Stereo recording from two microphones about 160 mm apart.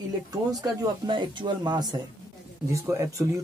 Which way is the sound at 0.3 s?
25° right (ahead or behind).